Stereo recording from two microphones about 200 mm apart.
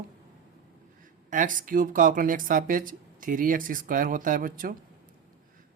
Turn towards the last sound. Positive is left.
turn(degrees=-45)  # may be behind; listen again after turning